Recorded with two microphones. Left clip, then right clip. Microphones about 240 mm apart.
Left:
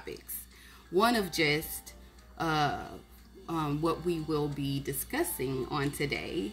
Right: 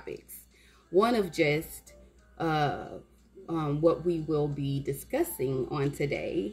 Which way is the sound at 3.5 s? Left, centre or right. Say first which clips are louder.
Right 5 dB; centre.